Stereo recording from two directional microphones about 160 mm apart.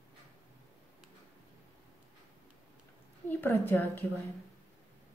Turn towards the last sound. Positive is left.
turn(degrees=10)  # may be behind; listen again after turning